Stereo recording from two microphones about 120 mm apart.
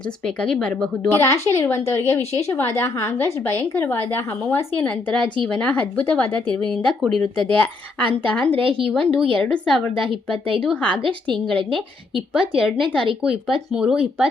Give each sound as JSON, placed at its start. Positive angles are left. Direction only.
{"t": 0.3, "sound": "speech", "side_deg": 5}
{"t": 1.1, "sound": "a woman's voice", "side_deg": 25}
{"t": 11.7, "sound": "a woman's voice", "side_deg": -5}